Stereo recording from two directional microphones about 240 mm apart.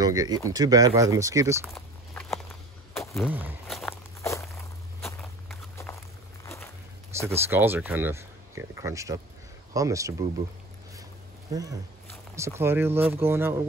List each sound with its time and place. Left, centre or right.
0.0 s speech: centre
1.7 s walk: centre
3.1 s speech: centre
4.2 s walk: centre
6.4 s a sound: centre
7.3 s speech: centre
11.5 s speech: centre